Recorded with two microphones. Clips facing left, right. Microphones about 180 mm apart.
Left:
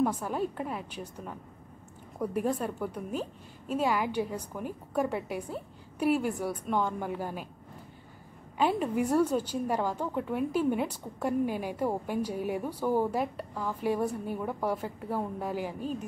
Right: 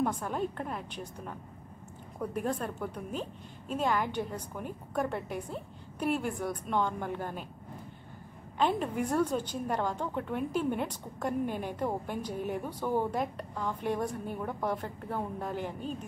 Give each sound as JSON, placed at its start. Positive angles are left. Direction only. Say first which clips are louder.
{"t": 0.0, "sound": "a woman's voice", "louder": "left 2 dB", "side_deg": 5}
{"t": 8.5, "sound": "a woman's voice", "louder": "left 2 dB", "side_deg": 5}